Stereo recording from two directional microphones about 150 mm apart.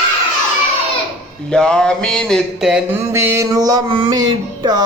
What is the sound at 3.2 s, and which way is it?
Music, 20° right (ahead or behind).